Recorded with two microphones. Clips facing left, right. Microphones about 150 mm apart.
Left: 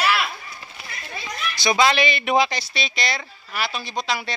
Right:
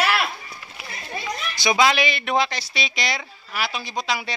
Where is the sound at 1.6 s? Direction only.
10° right (ahead or behind).